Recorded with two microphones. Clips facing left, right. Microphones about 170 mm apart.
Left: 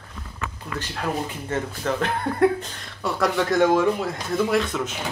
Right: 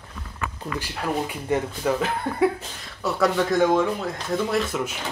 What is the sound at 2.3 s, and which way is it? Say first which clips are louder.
Speech: left 3 dB; centre (ahead or behind).